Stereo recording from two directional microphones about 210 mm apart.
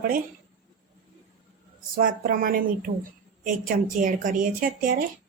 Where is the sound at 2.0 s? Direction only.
40° right (ahead or behind).